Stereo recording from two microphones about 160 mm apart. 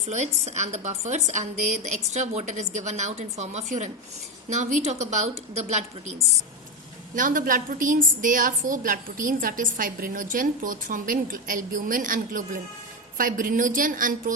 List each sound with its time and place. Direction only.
0.1 s a woman's voice: 45° right (ahead or behind)
7.2 s a woman's voice: 55° right (ahead or behind)